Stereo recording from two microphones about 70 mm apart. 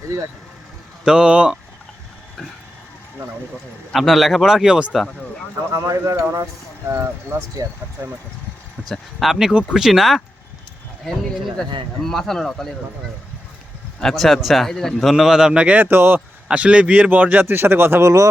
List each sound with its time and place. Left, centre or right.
1.0 s a man's voice: centre
3.9 s speech: centre
5.7 s speech: right
9.2 s a man's voice: centre
11.5 s speech: centre
14.0 s speech: centre
15.1 s a man's voice: centre
15.9 s speech: right
16.5 s a man's voice: centre; by 18.1 s right